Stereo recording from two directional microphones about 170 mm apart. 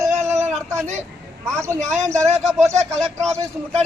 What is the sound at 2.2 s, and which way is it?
Speech, centre (ahead or behind).